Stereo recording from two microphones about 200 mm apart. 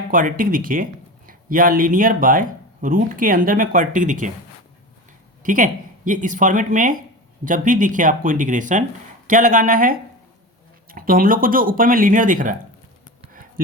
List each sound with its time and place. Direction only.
0.1 s speech: 40° right (ahead or behind)
5.4 s speech: 40° right (ahead or behind)